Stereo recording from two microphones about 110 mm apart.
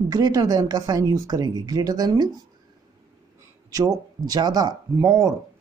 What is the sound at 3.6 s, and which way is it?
Speech, 35° right (ahead or behind).